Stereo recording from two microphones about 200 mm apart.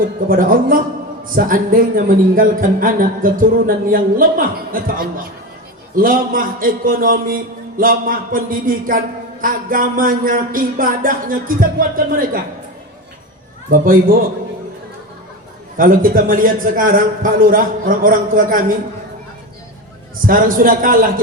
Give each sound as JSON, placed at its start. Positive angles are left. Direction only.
{"t": 0.3, "sound": "speech", "side_deg": -45}
{"t": 13.7, "sound": "speech", "side_deg": -45}
{"t": 15.8, "sound": "speech", "side_deg": -45}
{"t": 20.2, "sound": "speech", "side_deg": -45}